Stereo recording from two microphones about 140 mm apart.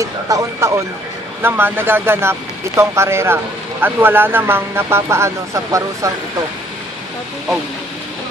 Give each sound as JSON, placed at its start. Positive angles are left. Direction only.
{"t": 0.0, "sound": "speech", "side_deg": -25}